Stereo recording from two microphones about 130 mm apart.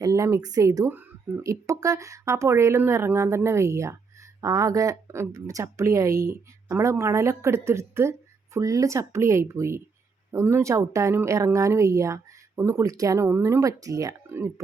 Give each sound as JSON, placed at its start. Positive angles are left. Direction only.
{"t": 0.0, "sound": "speech", "side_deg": -25}